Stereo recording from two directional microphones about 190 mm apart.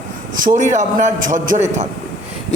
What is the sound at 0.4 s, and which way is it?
Speech, 40° right (ahead or behind).